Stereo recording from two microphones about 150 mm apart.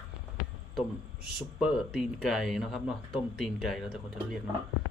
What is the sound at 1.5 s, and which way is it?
Speech, centre (ahead or behind).